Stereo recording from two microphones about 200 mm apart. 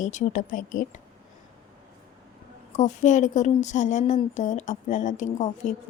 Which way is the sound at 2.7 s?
35° left (ahead or behind).